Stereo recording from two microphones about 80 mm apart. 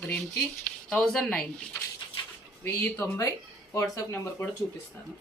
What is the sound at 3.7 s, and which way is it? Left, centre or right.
Speech, left.